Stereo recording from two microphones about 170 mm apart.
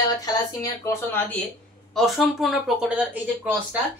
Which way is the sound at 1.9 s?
Centre (ahead or behind).